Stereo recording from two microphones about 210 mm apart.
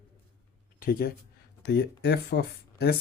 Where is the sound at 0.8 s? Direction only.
45° left (ahead or behind).